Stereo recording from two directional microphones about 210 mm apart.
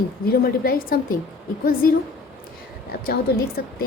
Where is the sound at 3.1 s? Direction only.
45° left (ahead or behind).